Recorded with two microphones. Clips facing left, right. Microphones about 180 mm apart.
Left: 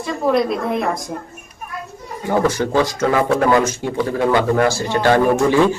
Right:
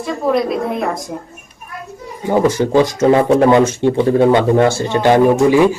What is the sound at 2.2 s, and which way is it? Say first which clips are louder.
Speech: right 4 dB; 15° right (ahead or behind).